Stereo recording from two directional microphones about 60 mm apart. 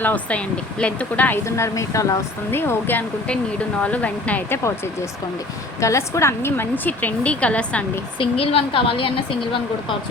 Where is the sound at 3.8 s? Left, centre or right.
Left.